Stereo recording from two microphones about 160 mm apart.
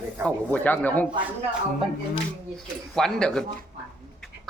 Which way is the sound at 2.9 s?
5° left (ahead or behind).